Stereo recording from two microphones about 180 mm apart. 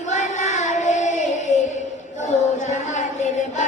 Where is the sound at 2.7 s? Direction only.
40° left (ahead or behind).